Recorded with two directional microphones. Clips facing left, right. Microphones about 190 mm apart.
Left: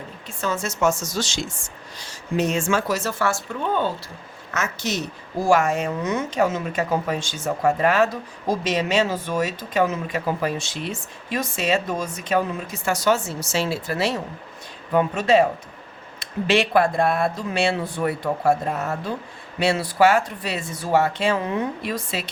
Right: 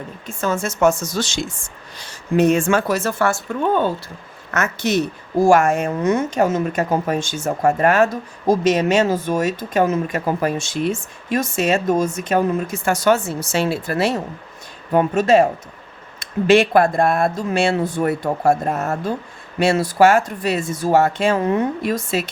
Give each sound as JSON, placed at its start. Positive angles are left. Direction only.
{"t": 0.3, "sound": "speech", "side_deg": -50}
{"t": 4.5, "sound": "a woman's voice", "side_deg": -60}